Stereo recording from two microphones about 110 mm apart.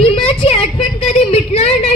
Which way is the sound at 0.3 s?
65° left (ahead or behind).